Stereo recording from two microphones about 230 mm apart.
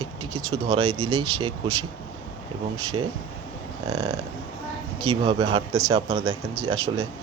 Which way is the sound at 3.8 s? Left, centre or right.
Right.